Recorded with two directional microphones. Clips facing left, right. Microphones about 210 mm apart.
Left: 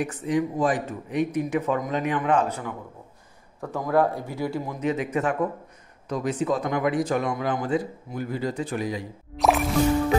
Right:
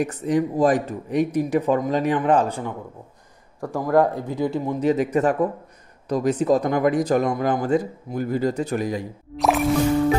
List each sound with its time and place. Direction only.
0.0 s speech: 40° right (ahead or behind)
3.6 s a man's voice: 10° right (ahead or behind)
4.7 s speech: 35° right (ahead or behind)
9.4 s music: centre (ahead or behind)